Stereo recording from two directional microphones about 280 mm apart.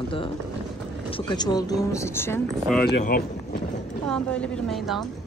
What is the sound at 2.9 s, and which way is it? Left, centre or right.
Speech, left.